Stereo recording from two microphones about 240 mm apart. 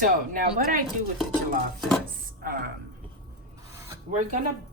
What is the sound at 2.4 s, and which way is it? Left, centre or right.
Music, right.